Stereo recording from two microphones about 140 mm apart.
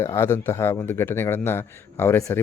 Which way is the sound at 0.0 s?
20° left (ahead or behind).